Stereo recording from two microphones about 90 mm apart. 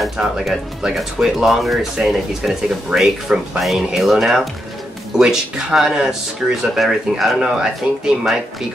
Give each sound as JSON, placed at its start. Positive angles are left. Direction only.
{"t": 0.0, "sound": "speech", "side_deg": 0}